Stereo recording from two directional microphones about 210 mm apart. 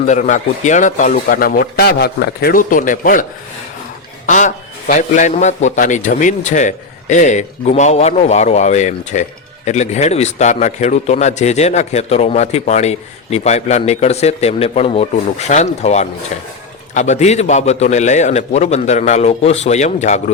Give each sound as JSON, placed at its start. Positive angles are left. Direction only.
{"t": 0.0, "sound": "a man's voice", "side_deg": 35}
{"t": 4.3, "sound": "a man's voice", "side_deg": 35}